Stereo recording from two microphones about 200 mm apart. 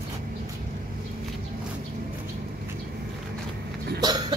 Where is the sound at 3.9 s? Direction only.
20° right (ahead or behind).